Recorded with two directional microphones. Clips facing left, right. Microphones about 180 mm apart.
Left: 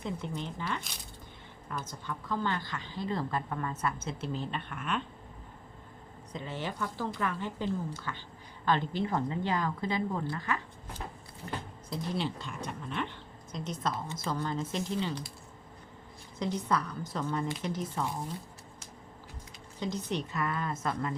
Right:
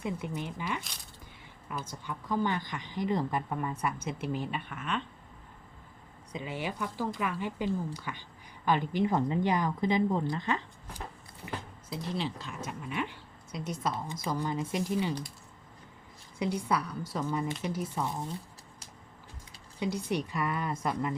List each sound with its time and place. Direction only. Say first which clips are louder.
0.0 s a woman's voice: right 1 dB; 10° right (ahead or behind)
6.3 s a woman's voice: right 1 dB; 10° right (ahead or behind)
11.4 s a woman's voice: left 1 dB; 5° right (ahead or behind)
16.4 s a woman's voice: right 1 dB; 10° right (ahead or behind)
19.8 s a woman's voice: right 2 dB; 10° right (ahead or behind)